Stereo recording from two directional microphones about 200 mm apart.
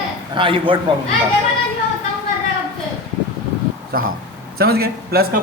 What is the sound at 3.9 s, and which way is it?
A man's voice, 50° right (ahead or behind).